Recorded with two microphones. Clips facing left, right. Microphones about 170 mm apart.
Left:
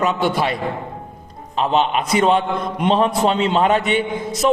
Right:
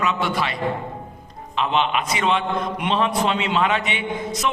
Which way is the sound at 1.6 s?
40° left (ahead or behind).